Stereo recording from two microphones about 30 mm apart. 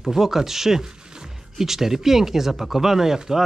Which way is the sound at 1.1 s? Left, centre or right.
Right.